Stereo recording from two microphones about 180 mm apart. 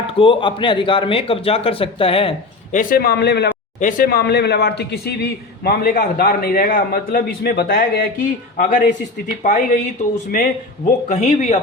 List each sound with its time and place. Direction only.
0.1 s a man's voice: 30° left (ahead or behind)
2.7 s speech: 55° left (ahead or behind)
3.8 s a man's voice: 50° left (ahead or behind)